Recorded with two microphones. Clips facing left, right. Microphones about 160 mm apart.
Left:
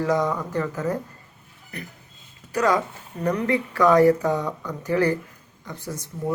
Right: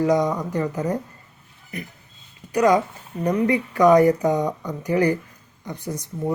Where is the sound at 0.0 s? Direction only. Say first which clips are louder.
Right 3 dB; 20° right (ahead or behind).